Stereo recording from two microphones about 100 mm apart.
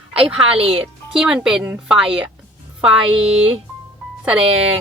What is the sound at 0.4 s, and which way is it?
Speech, 70° right (ahead or behind).